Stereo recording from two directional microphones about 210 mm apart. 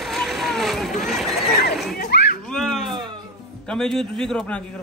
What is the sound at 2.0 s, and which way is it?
Children playing, 50° left (ahead or behind).